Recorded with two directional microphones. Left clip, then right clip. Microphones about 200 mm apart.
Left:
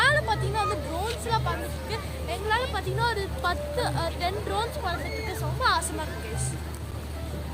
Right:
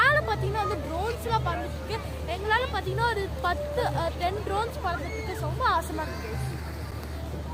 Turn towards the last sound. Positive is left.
turn(degrees=-15)  # may be behind; listen again after turning